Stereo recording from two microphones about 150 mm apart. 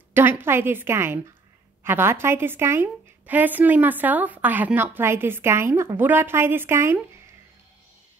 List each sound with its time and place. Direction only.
0.1 s a woman's voice: 15° right (ahead or behind)